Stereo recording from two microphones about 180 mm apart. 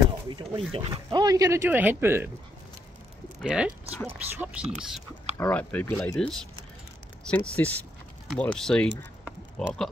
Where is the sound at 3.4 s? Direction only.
5° right (ahead or behind).